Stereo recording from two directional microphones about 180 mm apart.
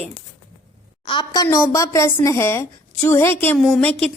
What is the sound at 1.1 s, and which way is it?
A woman's voice, 25° left (ahead or behind).